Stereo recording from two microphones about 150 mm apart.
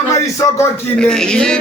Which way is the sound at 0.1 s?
20° left (ahead or behind).